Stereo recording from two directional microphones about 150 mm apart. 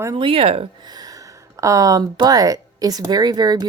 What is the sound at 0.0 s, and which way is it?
Speech, 30° right (ahead or behind).